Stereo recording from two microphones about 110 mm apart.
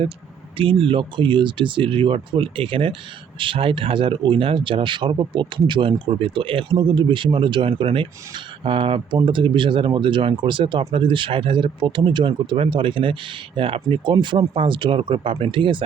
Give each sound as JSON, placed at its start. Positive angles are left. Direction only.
{"t": 0.5, "sound": "speech", "side_deg": -55}